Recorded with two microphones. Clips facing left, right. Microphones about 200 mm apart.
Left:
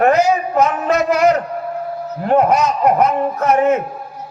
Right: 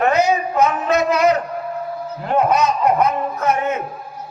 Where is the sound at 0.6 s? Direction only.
45° left (ahead or behind).